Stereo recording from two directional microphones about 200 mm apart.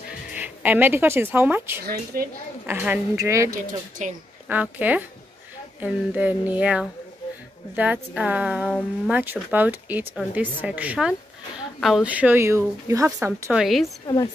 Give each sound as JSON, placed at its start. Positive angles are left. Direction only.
{"t": 0.3, "sound": "speech", "side_deg": -5}
{"t": 2.1, "sound": "a woman's voice", "side_deg": -45}
{"t": 2.6, "sound": "a woman's voice", "side_deg": -10}
{"t": 4.0, "sound": "a woman's voice", "side_deg": -35}
{"t": 4.5, "sound": "a woman's voice", "side_deg": -10}
{"t": 8.6, "sound": "speech", "side_deg": 5}
{"t": 9.1, "sound": "a woman's voice", "side_deg": -10}
{"t": 14.0, "sound": "a woman's voice", "side_deg": 20}